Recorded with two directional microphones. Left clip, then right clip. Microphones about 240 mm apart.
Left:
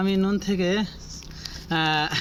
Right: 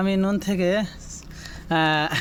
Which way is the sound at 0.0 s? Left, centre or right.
Right.